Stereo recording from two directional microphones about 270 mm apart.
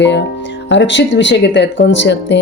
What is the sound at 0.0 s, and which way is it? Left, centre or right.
Speech, left.